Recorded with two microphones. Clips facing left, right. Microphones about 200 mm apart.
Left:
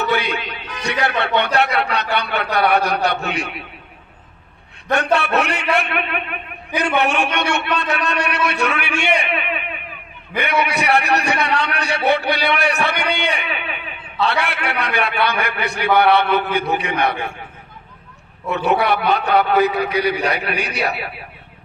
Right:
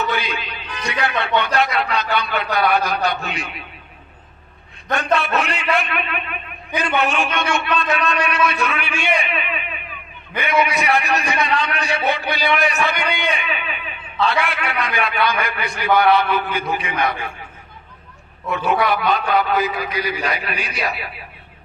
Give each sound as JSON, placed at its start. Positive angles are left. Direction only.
{"t": 0.0, "sound": "a man's voice", "side_deg": 65}
{"t": 5.1, "sound": "a man's voice", "side_deg": 65}
{"t": 18.5, "sound": "a man's voice", "side_deg": 65}